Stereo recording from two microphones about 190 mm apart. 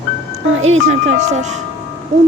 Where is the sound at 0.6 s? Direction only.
35° right (ahead or behind).